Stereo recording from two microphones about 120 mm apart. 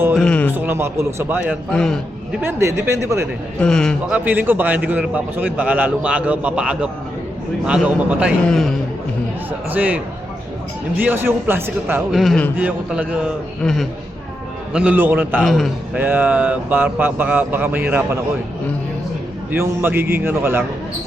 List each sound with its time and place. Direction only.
0.2 s a sound: 10° left (ahead or behind)
0.5 s a man's voice: 15° right (ahead or behind)
1.7 s a man's voice: 5° left (ahead or behind)
2.4 s speech: 20° right (ahead or behind)
3.6 s a man's voice: 5° left (ahead or behind)
4.1 s a man's voice: 15° right (ahead or behind)
8.4 s a man's voice: 5° left (ahead or behind)
9.7 s a man's voice: 15° right (ahead or behind)
12.1 s a man's voice: centre (ahead or behind)
14.7 s a man's voice: 10° right (ahead or behind)
15.4 s a man's voice: centre (ahead or behind)
16.0 s a man's voice: 15° right (ahead or behind)
19.5 s a man's voice: 15° right (ahead or behind)